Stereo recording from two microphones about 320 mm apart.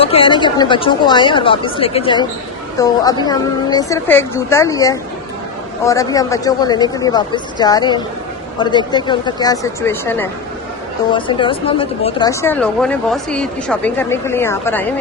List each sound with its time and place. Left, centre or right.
0.0 s speech: centre